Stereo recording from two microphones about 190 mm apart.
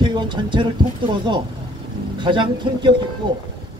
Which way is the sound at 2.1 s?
25° right (ahead or behind).